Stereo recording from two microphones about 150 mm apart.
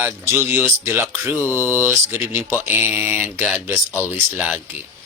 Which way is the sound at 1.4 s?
15° left (ahead or behind).